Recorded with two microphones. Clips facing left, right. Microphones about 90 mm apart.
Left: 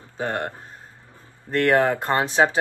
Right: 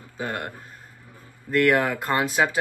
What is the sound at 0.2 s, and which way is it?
Speech, 35° left (ahead or behind).